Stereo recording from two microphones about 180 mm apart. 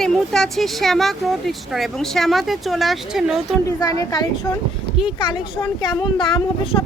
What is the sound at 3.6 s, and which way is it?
Speech, 20° left (ahead or behind).